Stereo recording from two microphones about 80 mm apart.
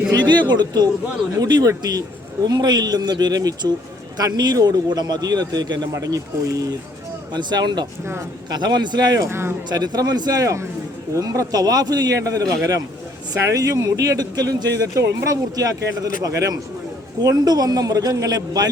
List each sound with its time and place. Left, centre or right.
0.1 s a man's voice: right
7.3 s a man's voice: right
9.2 s speech: right
9.6 s a man's voice: right